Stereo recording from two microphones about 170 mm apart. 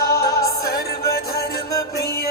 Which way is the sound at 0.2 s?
20° left (ahead or behind).